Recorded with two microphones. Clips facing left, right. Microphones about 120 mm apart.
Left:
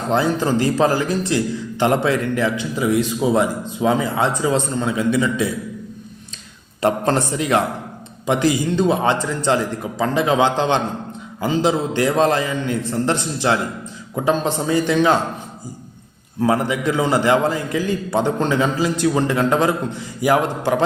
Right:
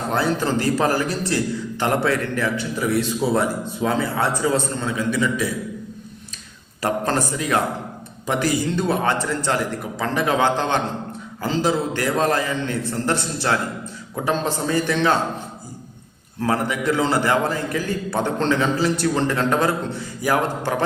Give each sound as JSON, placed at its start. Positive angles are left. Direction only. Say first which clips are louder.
{"t": 0.1, "sound": "a man's voice", "louder": "left 4 dB", "side_deg": 20}
{"t": 6.8, "sound": "a man's voice", "louder": "left 4 dB", "side_deg": 25}
{"t": 16.4, "sound": "a man's voice", "louder": "left 3 dB", "side_deg": 15}